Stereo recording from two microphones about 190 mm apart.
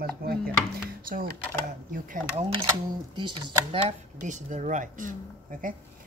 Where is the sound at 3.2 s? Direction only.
25° right (ahead or behind).